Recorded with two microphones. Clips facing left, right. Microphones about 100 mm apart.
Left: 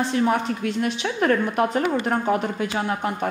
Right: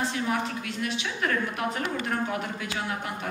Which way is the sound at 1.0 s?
40° left (ahead or behind).